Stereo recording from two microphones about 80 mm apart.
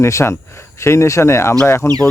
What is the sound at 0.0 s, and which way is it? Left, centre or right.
Speech, left.